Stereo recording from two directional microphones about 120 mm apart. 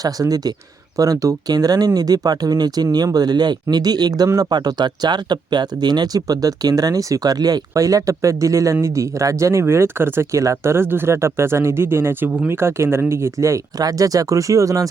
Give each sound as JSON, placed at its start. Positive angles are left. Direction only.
{"t": 0.0, "sound": "speech", "side_deg": -30}